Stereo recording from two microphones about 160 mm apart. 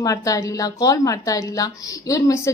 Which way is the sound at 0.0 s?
20° left (ahead or behind).